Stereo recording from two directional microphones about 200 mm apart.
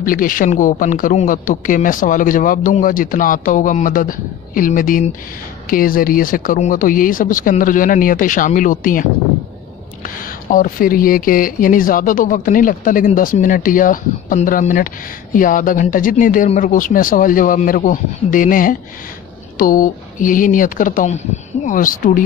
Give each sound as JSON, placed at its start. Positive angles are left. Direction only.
{"t": 0.0, "sound": "speech", "side_deg": 45}
{"t": 10.0, "sound": "speech", "side_deg": 45}